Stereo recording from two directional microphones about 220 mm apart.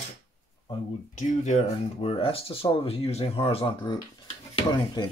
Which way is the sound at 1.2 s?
35° left (ahead or behind).